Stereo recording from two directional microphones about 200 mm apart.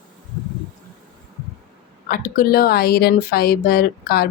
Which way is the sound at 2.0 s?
45° left (ahead or behind).